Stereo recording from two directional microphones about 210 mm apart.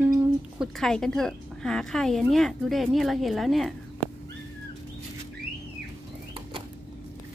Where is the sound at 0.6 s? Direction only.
Centre (ahead or behind).